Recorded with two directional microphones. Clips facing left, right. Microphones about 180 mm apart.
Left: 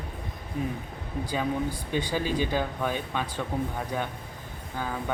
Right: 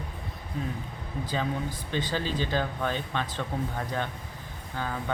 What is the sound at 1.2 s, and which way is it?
Speech, 10° left (ahead or behind).